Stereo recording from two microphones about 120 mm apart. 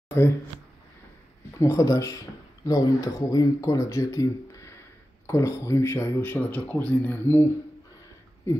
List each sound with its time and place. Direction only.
1.6 s speech: 25° left (ahead or behind)
8.5 s speech: 20° left (ahead or behind)